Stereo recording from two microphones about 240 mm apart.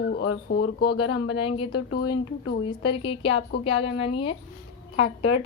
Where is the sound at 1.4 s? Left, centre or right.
Left.